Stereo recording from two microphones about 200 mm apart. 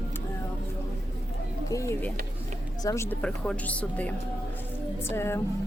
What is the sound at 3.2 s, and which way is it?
Speech, 5° left (ahead or behind).